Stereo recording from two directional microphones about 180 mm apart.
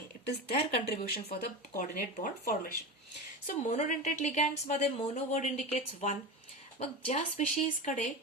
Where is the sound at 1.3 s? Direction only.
50° left (ahead or behind).